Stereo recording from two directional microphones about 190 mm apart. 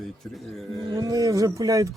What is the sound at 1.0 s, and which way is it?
Speech, 20° right (ahead or behind).